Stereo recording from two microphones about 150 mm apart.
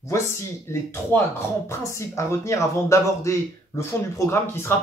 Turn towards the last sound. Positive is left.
turn(degrees=15)  # may be behind; listen again after turning